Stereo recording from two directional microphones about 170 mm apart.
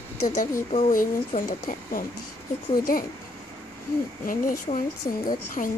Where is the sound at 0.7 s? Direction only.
45° left (ahead or behind).